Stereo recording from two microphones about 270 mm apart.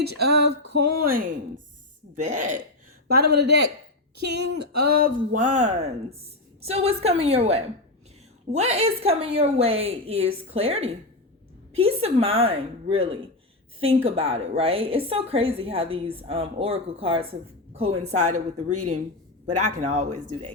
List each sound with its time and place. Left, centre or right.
0.0 s music: right
0.7 s a woman's voice: right
18.7 s speech: right
19.9 s a woman's voice: right